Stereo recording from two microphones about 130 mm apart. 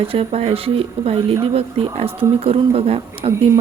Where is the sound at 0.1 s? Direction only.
50° right (ahead or behind).